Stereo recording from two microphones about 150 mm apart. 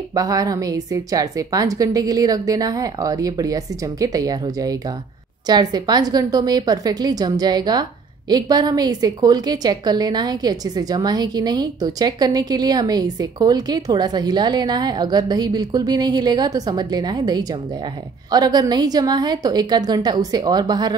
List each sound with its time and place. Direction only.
0.1 s a woman's voice: 25° right (ahead or behind)